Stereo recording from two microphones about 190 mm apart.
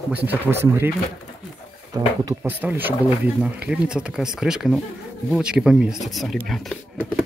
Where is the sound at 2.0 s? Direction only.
15° right (ahead or behind).